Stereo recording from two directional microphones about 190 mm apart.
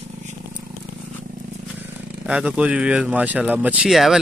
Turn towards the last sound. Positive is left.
turn(degrees=0)  # may be behind; listen again after turning